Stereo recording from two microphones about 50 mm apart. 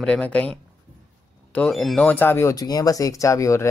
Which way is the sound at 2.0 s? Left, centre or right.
Left.